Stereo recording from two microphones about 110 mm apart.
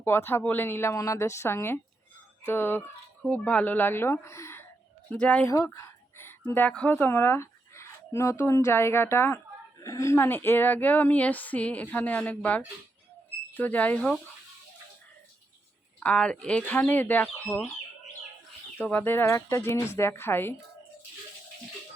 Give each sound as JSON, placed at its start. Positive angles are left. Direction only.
{"t": 0.0, "sound": "a woman's voice", "side_deg": 20}
{"t": 5.1, "sound": "speech", "side_deg": 10}
{"t": 5.5, "sound": "speech", "side_deg": 25}
{"t": 16.0, "sound": "speech", "side_deg": 10}
{"t": 18.8, "sound": "a woman's voice", "side_deg": 15}